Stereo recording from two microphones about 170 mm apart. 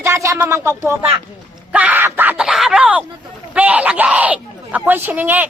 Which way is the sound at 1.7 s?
10° right (ahead or behind).